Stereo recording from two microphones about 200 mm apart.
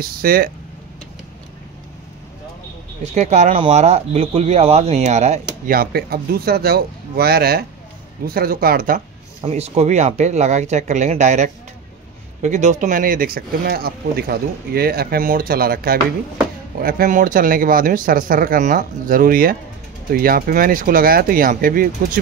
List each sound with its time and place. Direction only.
0.0 s speech: 50° right (ahead or behind)
3.0 s speech: 35° right (ahead or behind)
9.4 s speech: 30° right (ahead or behind)